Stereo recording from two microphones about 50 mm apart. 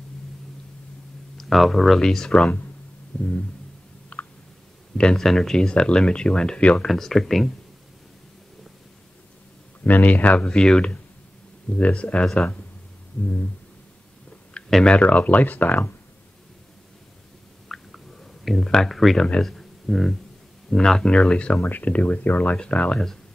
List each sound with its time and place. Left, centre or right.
1.4 s speech: centre
2.0 s speech: centre
4.1 s a sound: left
5.1 s speech: centre
6.9 s speech: centre
9.8 s speech: left
14.6 s a sound: left
14.9 s speech: left
17.6 s a sound: centre
18.7 s speech: centre
19.4 s a sound: centre
20.7 s speech: centre
21.1 s speech: centre
21.6 s speech: left